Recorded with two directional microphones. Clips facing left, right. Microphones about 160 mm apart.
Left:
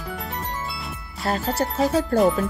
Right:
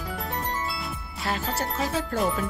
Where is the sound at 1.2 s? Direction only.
40° left (ahead or behind).